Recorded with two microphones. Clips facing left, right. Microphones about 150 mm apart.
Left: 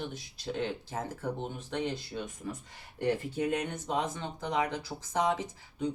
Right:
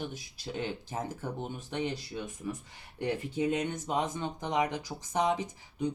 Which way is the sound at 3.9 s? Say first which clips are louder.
Even; 15° right (ahead or behind).